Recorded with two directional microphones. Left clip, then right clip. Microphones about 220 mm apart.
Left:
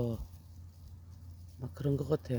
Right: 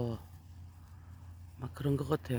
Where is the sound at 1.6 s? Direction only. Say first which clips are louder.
Even; 15° left (ahead or behind).